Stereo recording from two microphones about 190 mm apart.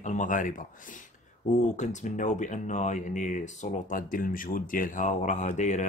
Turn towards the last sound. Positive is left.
turn(degrees=40)  # may be behind; listen again after turning